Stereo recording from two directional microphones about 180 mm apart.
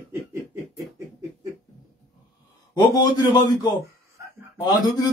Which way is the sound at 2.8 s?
20° left (ahead or behind).